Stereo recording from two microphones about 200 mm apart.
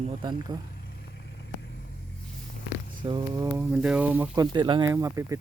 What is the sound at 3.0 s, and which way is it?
Speech, 20° right (ahead or behind).